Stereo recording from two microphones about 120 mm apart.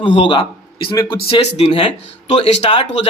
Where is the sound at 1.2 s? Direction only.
50° left (ahead or behind).